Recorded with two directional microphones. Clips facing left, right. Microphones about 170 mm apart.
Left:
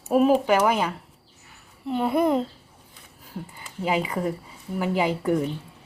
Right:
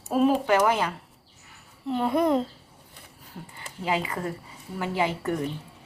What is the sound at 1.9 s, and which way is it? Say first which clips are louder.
Speech: left 1 dB; 5° left (ahead or behind).